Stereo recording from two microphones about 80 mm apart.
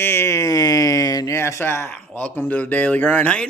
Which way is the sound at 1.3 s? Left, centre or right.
Left.